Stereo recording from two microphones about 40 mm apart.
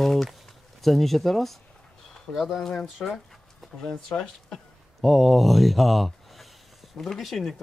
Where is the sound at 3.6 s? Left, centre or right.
Centre.